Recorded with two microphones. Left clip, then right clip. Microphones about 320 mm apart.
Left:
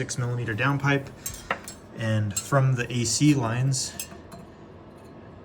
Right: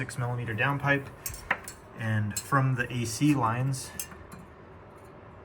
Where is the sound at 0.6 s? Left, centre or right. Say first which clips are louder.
Left 1 dB; centre.